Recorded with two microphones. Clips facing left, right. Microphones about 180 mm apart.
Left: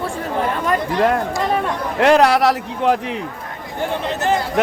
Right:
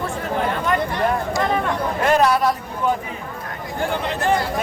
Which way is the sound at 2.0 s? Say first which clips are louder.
Left 5 dB; 75° left (ahead or behind).